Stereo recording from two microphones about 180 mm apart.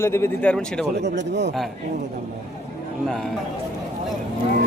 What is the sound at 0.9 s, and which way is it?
Speech, 75° right (ahead or behind).